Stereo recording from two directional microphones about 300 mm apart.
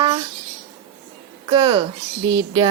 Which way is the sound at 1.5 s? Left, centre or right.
Centre.